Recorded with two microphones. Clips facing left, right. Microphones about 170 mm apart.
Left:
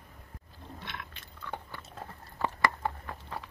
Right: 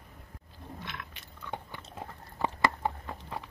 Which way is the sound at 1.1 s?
15° right (ahead or behind).